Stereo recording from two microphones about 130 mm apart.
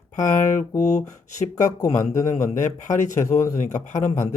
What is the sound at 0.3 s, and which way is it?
Speech, 75° left (ahead or behind).